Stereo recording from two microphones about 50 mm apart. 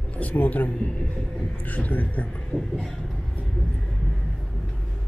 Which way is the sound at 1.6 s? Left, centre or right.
Left.